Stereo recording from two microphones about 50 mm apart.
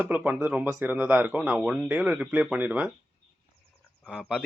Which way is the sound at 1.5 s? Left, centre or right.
Right.